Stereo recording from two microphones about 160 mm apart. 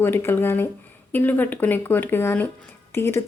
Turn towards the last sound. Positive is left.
turn(degrees=15)  # may be behind; listen again after turning